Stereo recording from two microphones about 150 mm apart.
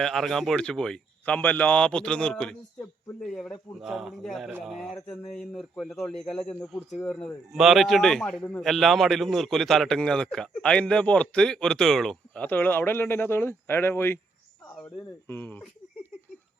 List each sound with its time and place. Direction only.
0.0 s a man's voice: centre (ahead or behind)
15.3 s a man's voice: 15° left (ahead or behind)